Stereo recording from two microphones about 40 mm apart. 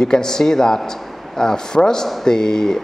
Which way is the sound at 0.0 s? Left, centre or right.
Centre.